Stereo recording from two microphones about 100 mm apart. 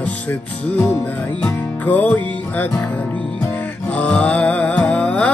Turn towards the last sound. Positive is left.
turn(degrees=15)  # may be behind; listen again after turning